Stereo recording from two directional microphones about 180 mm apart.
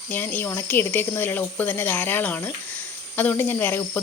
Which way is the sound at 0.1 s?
10° left (ahead or behind).